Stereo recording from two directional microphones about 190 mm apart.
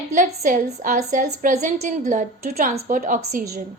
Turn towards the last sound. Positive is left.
turn(degrees=-45)  # may be behind; listen again after turning